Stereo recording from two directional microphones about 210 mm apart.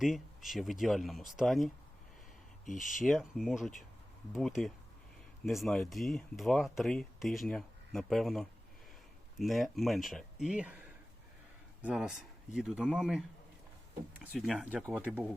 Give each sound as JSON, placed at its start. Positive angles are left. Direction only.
{"t": 0.0, "sound": "speech", "side_deg": 0}
{"t": 2.6, "sound": "speech", "side_deg": 40}
{"t": 3.0, "sound": "speech", "side_deg": 0}